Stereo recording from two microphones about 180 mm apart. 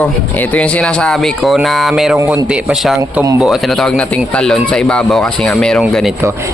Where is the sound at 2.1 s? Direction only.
15° right (ahead or behind).